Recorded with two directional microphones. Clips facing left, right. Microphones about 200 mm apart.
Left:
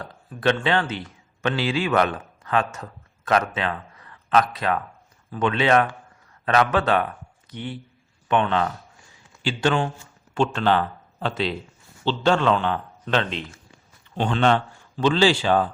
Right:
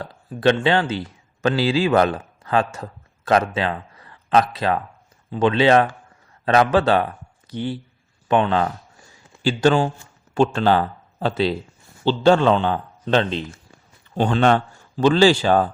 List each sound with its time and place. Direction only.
0.0 s speech: 30° right (ahead or behind)
8.3 s a sound: 35° right (ahead or behind)
10.3 s speech: 35° right (ahead or behind)
14.2 s speech: 40° right (ahead or behind)